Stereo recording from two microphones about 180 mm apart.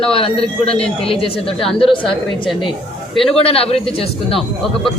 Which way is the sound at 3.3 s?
30° left (ahead or behind).